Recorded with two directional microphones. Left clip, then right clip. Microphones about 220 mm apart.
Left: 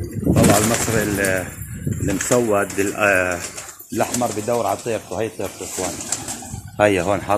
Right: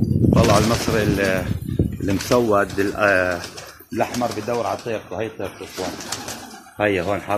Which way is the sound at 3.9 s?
25° left (ahead or behind).